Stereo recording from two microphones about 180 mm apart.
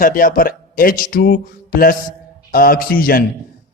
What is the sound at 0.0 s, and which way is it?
A man's voice, 50° left (ahead or behind).